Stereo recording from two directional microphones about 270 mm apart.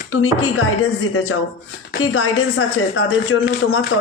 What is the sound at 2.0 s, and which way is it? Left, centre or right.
Speech, left.